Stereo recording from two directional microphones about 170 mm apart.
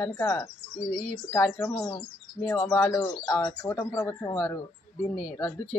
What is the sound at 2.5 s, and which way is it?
Speech, 15° left (ahead or behind).